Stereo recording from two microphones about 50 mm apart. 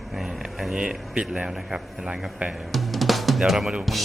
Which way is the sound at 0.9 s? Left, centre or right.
Centre.